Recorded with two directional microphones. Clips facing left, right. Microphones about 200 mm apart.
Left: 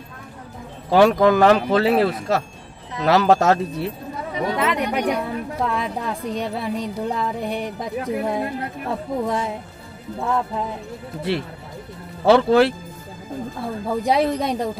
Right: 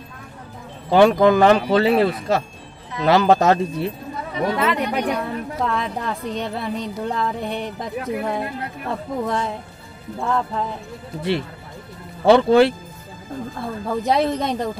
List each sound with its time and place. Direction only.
0.8 s speech: centre (ahead or behind)
4.6 s a woman's voice: 15° left (ahead or behind)
5.2 s a woman's voice: 5° left (ahead or behind)
12.3 s a woman's voice: centre (ahead or behind)